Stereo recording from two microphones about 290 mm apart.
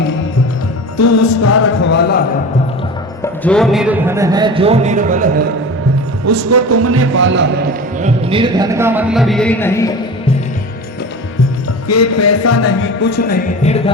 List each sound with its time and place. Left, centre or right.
0.9 s a sound: left
1.8 s music: left
3.4 s a man's voice: centre; by 5.5 s right
6.2 s a man's voice: right
8.0 s speech: centre
11.9 s a sound: left
13.0 s music: left